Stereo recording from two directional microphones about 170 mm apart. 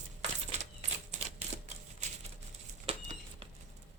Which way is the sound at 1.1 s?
45° right (ahead or behind).